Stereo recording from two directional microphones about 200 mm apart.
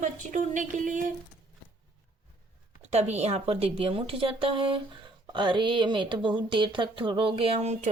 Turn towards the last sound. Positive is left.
turn(degrees=-35)  # may be behind; listen again after turning